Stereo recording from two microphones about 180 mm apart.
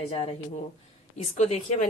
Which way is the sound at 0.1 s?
35° left (ahead or behind).